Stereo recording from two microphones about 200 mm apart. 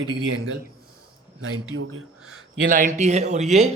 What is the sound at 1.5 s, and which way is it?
Speech, 90° right.